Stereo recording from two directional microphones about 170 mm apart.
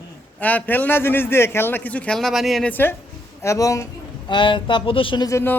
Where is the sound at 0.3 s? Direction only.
10° left (ahead or behind).